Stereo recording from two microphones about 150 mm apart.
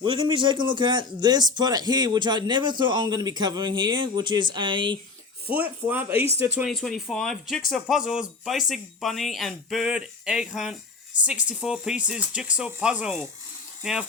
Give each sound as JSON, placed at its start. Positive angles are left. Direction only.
{"t": 0.0, "sound": "a man's voice", "side_deg": -35}
{"t": 5.5, "sound": "speech", "side_deg": -10}
{"t": 6.7, "sound": "speech", "side_deg": 0}